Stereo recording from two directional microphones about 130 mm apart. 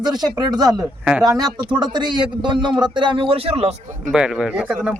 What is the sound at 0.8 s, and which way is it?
Speech, 10° right (ahead or behind).